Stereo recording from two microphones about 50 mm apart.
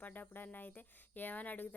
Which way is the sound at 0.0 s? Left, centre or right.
Left.